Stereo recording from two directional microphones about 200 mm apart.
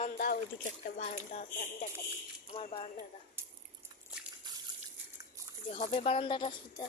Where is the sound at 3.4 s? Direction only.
10° right (ahead or behind).